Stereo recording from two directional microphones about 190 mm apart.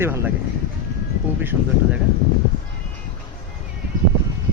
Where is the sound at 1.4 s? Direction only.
10° right (ahead or behind).